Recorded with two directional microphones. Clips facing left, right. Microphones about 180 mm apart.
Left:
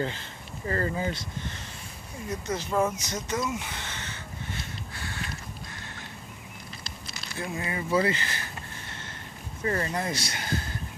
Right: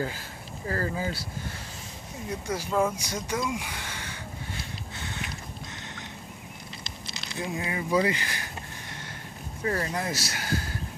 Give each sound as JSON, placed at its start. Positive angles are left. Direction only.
{"t": 0.7, "sound": "speech", "side_deg": 0}
{"t": 2.2, "sound": "speech", "side_deg": -10}
{"t": 4.9, "sound": "a sound", "side_deg": -20}
{"t": 7.3, "sound": "speech", "side_deg": -15}
{"t": 9.6, "sound": "speech", "side_deg": -5}